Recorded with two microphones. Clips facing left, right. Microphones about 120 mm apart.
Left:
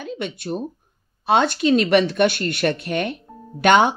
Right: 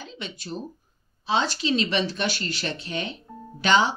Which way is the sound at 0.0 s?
55° left (ahead or behind).